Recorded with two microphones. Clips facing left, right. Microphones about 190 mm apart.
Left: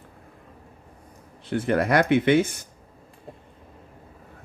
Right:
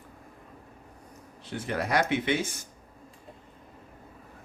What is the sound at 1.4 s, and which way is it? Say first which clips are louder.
Speech: left 9 dB; 55° left (ahead or behind).